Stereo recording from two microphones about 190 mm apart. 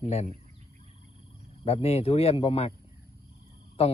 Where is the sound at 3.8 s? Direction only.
30° left (ahead or behind).